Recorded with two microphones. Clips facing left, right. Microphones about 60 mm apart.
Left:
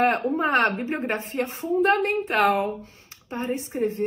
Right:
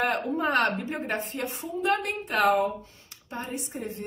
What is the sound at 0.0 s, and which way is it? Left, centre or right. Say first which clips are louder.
Speech: left 5 dB; left.